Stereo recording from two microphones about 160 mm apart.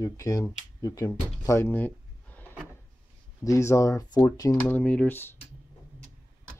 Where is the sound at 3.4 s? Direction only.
20° left (ahead or behind).